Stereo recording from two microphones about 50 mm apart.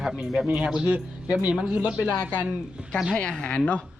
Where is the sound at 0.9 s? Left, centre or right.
Right.